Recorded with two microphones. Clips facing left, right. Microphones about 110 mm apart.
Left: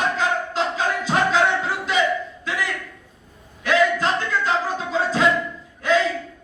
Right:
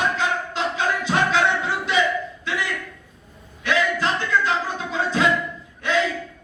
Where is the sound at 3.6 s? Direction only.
40° left (ahead or behind).